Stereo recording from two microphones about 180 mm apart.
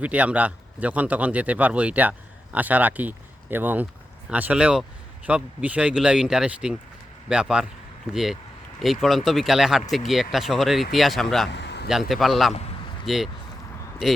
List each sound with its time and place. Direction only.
0.0 s a man's voice: 10° right (ahead or behind)
11.5 s a sound: 70° left (ahead or behind)
11.9 s speech: centre (ahead or behind)